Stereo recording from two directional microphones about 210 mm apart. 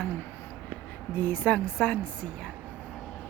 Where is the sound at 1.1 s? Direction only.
10° left (ahead or behind).